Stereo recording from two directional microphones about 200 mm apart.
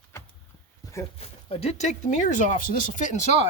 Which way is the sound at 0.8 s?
20° left (ahead or behind).